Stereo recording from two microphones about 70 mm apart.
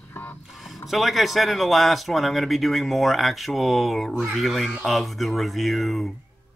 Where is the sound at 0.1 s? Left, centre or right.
Left.